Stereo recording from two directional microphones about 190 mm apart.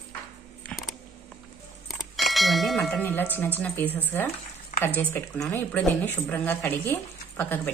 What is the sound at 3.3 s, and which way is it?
Speech, 10° left (ahead or behind).